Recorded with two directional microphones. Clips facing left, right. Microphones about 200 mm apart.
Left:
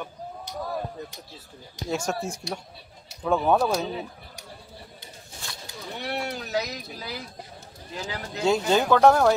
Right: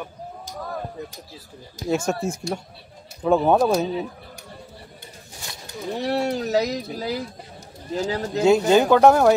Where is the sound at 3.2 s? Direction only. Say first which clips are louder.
Right 5 dB; 25° right (ahead or behind).